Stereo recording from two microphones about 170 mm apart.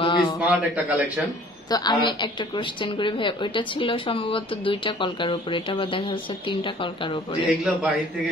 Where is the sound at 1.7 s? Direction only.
25° left (ahead or behind).